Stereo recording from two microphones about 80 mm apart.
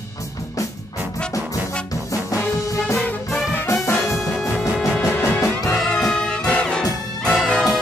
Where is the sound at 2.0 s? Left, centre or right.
Left.